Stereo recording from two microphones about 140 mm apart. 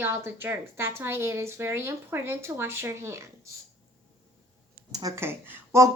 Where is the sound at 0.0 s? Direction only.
15° right (ahead or behind).